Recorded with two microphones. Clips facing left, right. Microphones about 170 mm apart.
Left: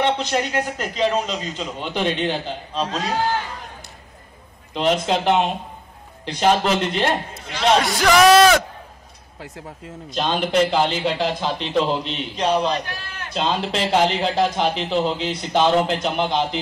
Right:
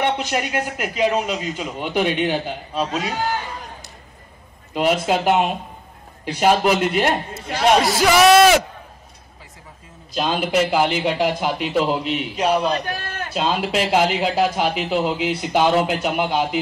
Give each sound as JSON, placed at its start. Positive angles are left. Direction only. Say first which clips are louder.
{"t": 0.0, "sound": "a man's voice", "louder": "left 1 dB", "side_deg": -10}
{"t": 4.7, "sound": "a man's voice", "louder": "right 1 dB", "side_deg": -10}
{"t": 9.4, "sound": "speech", "louder": "left 11 dB", "side_deg": 75}
{"t": 10.1, "sound": "a man's voice", "louder": "even", "side_deg": -5}
{"t": 12.8, "sound": "a sound", "louder": "right 6 dB", "side_deg": -50}
{"t": 13.3, "sound": "a man's voice", "louder": "right 1 dB", "side_deg": -10}